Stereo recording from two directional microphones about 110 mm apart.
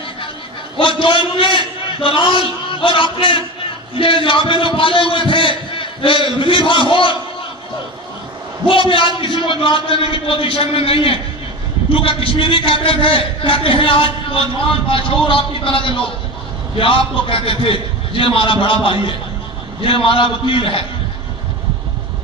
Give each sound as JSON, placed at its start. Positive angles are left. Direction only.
{"t": 0.8, "sound": "a man's voice", "side_deg": 50}
{"t": 8.6, "sound": "a man's voice", "side_deg": 50}